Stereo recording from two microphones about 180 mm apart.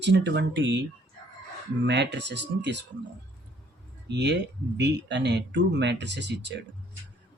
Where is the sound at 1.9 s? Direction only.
75° right (ahead or behind).